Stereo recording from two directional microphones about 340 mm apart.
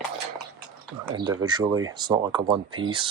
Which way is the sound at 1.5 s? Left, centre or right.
Centre.